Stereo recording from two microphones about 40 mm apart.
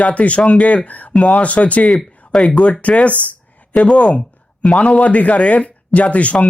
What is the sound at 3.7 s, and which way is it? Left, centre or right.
Speech, left.